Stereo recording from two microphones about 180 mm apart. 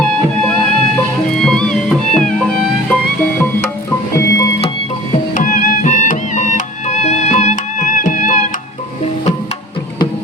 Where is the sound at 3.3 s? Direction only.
10° left (ahead or behind).